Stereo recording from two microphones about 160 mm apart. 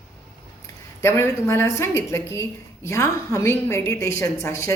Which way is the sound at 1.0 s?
15° left (ahead or behind).